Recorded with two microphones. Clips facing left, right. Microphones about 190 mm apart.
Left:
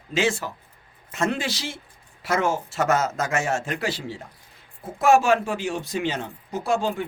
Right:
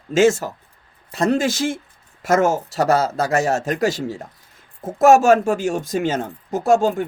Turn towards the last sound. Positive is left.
turn(degrees=-45)  # may be behind; listen again after turning